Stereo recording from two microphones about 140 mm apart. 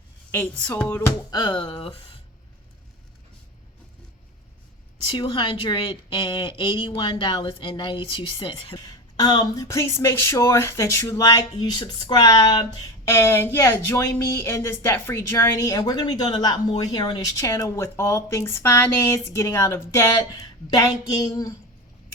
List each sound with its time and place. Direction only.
0.3 s speech: 10° left (ahead or behind)
1.3 s speech: 30° left (ahead or behind)
5.1 s a woman's voice: 35° left (ahead or behind); by 15.8 s 20° left (ahead or behind)
15.9 s a woman's voice: 30° left (ahead or behind)